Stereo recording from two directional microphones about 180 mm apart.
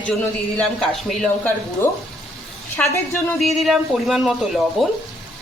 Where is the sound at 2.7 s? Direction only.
10° left (ahead or behind).